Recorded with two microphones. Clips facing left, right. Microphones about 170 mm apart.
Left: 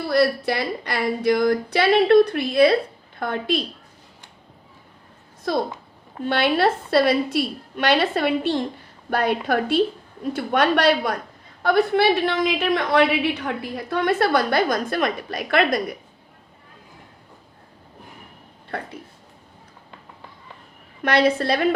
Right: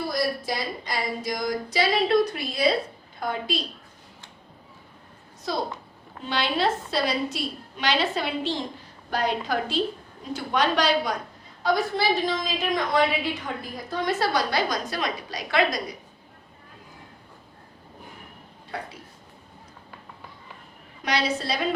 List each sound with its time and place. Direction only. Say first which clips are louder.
0.1 s a woman's voice: left 7 dB; 65° left (ahead or behind)
5.5 s a woman's voice: left 5 dB; 55° left (ahead or behind)
18.7 s a woman's voice: left 4 dB; 55° left (ahead or behind)
21.0 s a woman's voice: left 7 dB; 55° left (ahead or behind)